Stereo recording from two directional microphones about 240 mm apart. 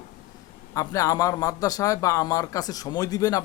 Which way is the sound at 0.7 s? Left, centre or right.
Centre.